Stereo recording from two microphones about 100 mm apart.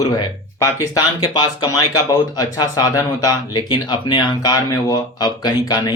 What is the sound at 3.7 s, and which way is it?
Speech, 55° left (ahead or behind).